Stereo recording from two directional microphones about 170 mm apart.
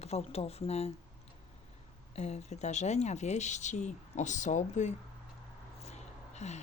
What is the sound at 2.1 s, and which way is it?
Speech, 40° left (ahead or behind).